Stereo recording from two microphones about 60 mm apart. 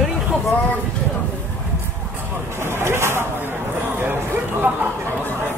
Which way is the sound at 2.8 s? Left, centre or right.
Right.